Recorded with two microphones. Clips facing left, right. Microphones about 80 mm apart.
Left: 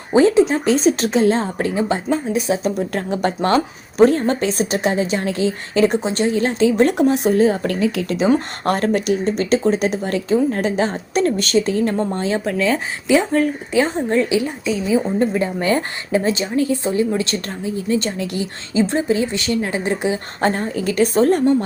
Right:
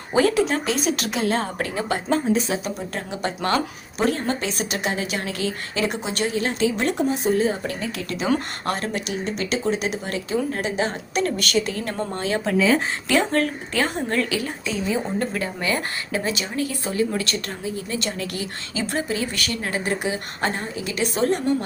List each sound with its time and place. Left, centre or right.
0.1 s a woman's voice: left
2.0 s speech: centre
2.6 s speech: left
6.9 s speech: left
8.1 s a woman's voice: left
8.6 s speech: left
12.5 s speech: centre
13.1 s a woman's voice: centre
15.6 s a woman's voice: left
20.7 s speech: left